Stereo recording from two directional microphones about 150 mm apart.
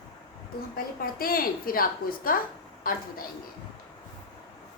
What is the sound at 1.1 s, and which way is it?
A woman's voice, 75° left (ahead or behind).